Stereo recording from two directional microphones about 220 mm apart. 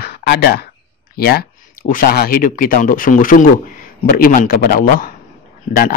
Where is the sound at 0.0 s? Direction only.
45° left (ahead or behind).